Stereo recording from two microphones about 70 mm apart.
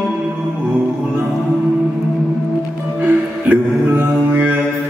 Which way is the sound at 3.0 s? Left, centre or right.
Right.